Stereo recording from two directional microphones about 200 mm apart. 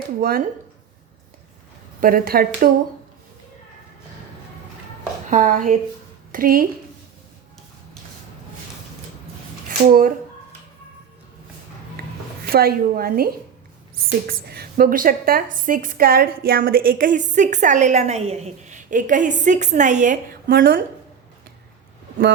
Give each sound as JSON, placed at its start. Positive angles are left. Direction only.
{"t": 0.2, "sound": "a woman's voice", "side_deg": -45}
{"t": 2.0, "sound": "a woman's voice", "side_deg": -45}
{"t": 5.3, "sound": "a woman's voice", "side_deg": -40}
{"t": 9.6, "sound": "speech", "side_deg": -45}
{"t": 12.0, "sound": "a sound", "side_deg": -50}
{"t": 12.5, "sound": "a woman's voice", "side_deg": -50}